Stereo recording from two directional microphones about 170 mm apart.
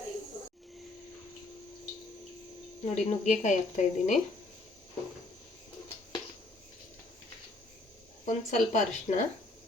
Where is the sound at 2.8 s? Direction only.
40° left (ahead or behind).